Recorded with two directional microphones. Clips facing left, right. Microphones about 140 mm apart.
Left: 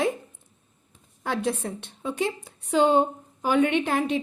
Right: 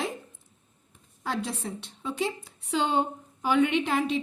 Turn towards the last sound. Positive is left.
turn(degrees=50)  # may be behind; listen again after turning